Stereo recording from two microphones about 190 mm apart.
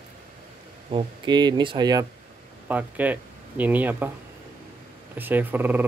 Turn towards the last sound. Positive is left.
turn(degrees=-10)  # may be behind; listen again after turning